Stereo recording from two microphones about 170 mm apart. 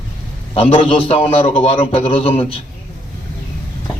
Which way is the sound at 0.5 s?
35° left (ahead or behind).